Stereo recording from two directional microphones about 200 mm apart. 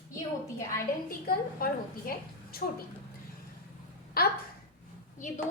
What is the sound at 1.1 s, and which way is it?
A woman's voice, 45° left (ahead or behind).